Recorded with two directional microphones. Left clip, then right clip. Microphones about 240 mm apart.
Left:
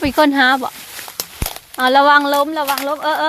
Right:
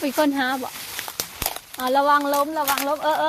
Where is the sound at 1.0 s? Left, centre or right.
Centre.